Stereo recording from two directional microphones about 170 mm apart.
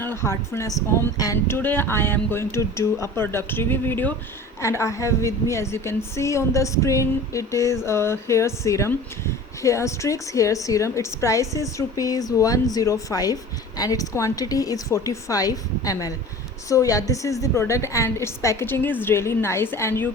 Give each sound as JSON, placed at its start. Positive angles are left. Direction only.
{"t": 0.0, "sound": "a woman's voice", "side_deg": 15}